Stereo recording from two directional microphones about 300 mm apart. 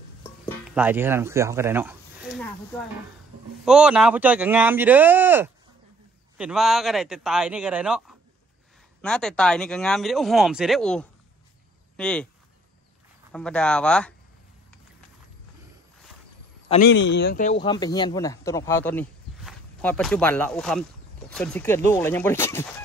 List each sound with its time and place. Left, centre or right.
0.5 s speech: centre
3.6 s speech: centre
13.3 s speech: centre
16.6 s speech: left
16.9 s speech: left; by 22.7 s centre